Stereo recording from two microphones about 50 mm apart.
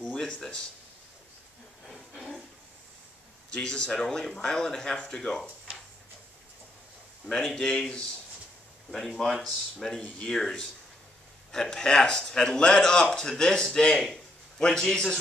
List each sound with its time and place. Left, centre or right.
0.0 s a sound: centre
3.5 s a man's voice: centre
7.2 s a man's voice: centre
9.8 s a man's voice: left